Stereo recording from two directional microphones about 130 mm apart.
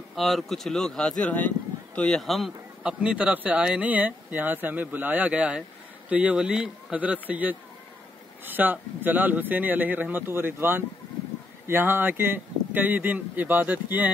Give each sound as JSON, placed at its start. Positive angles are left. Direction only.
{"t": 0.1, "sound": "a man's voice", "side_deg": 0}